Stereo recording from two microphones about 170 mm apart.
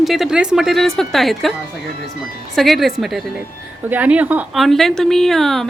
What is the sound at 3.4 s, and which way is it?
Speech, 10° right (ahead or behind).